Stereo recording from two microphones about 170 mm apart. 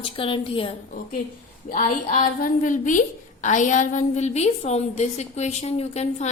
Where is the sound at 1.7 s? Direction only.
50° left (ahead or behind).